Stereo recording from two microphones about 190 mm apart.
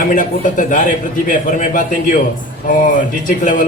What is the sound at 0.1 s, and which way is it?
A man's voice, 45° left (ahead or behind).